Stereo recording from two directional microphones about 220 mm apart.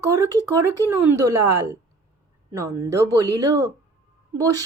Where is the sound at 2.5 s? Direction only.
15° right (ahead or behind).